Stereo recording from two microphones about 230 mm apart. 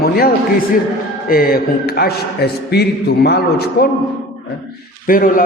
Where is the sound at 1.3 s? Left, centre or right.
Left.